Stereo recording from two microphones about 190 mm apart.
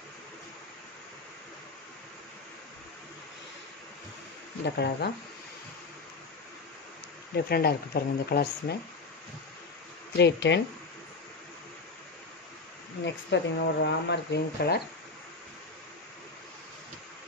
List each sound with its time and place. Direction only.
4.6 s speech: 60° left (ahead or behind)
7.3 s speech: 55° left (ahead or behind)
10.1 s speech: 65° left (ahead or behind)
13.0 s speech: 65° left (ahead or behind)